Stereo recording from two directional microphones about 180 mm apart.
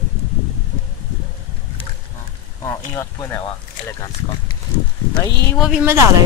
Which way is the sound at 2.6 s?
15° left (ahead or behind).